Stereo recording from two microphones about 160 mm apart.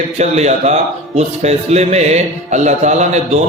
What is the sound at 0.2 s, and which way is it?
A man's voice, 45° right (ahead or behind).